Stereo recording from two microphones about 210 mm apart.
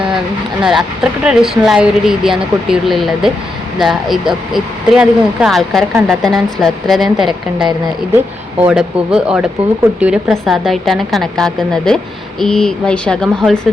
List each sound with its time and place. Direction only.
0.6 s a woman's voice: 5° right (ahead or behind)